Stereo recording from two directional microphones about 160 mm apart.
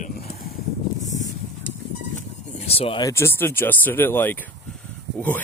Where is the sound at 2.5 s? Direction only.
40° left (ahead or behind).